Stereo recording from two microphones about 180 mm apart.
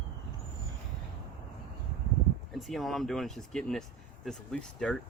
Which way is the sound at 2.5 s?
Centre (ahead or behind).